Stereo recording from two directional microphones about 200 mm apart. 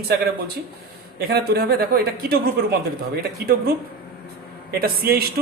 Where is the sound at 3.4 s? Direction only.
50° right (ahead or behind).